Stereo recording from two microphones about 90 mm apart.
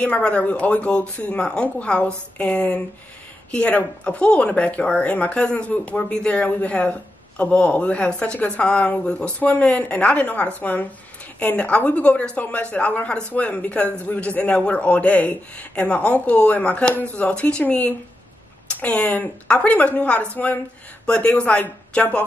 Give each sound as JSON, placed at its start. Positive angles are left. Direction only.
{"t": 0.0, "sound": "speech", "side_deg": 15}